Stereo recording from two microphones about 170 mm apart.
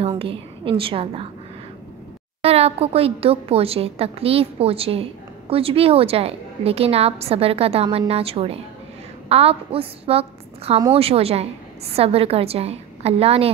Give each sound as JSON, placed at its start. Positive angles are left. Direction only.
{"t": 0.0, "sound": "a woman's voice", "side_deg": -35}
{"t": 2.4, "sound": "a woman's voice", "side_deg": -35}